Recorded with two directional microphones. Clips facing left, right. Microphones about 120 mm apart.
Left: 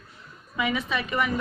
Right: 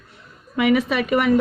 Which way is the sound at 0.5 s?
70° right (ahead or behind).